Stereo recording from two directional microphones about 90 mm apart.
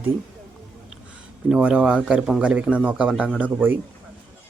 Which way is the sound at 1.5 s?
10° right (ahead or behind).